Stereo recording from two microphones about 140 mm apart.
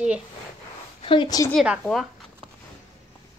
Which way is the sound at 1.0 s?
35° left (ahead or behind).